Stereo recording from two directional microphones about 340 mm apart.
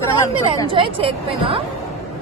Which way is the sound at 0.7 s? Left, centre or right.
Centre.